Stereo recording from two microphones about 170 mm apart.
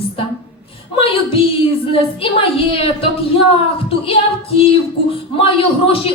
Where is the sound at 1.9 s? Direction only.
30° left (ahead or behind).